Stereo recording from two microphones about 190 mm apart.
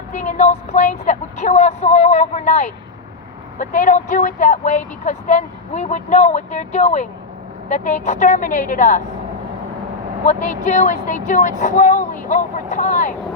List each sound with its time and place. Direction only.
0.1 s a woman's voice: 40° left (ahead or behind)
10.2 s a woman's voice: 40° left (ahead or behind)